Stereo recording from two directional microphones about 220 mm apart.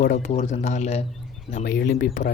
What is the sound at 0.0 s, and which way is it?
Speech, 35° left (ahead or behind).